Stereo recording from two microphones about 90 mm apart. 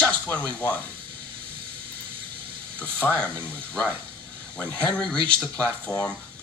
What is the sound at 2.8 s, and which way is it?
Speech, 15° left (ahead or behind).